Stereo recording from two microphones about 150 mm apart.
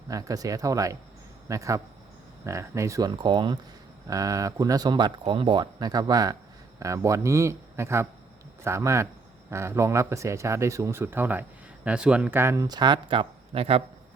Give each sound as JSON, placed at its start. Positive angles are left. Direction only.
{"t": 0.1, "sound": "speech", "side_deg": -25}
{"t": 3.1, "sound": "speech", "side_deg": -30}